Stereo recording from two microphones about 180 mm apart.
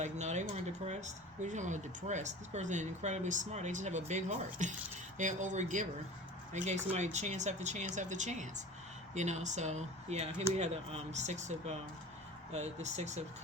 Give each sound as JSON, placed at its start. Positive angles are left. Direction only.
{"t": 0.0, "sound": "speech", "side_deg": -40}